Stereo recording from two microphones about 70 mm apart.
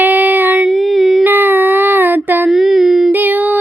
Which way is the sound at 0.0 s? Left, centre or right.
Right.